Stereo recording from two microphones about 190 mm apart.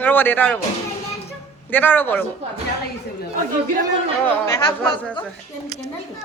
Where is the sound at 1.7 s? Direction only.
10° left (ahead or behind).